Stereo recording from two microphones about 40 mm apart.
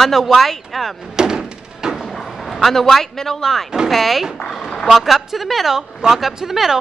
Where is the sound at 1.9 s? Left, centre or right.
Centre.